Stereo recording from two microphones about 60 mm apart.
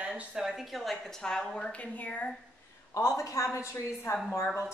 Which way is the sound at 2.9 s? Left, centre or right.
Left.